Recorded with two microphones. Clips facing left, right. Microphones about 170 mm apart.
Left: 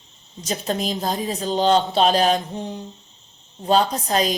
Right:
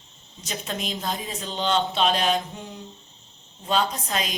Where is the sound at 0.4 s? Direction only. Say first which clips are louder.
Left 7 dB; 35° left (ahead or behind).